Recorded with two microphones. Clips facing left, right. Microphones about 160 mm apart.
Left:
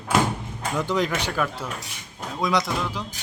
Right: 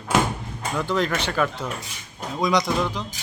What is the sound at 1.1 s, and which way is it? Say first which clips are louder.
Speech: right 2 dB; 5° left (ahead or behind).